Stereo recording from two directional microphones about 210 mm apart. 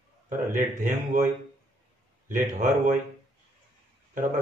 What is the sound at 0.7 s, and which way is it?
Speech, 35° right (ahead or behind).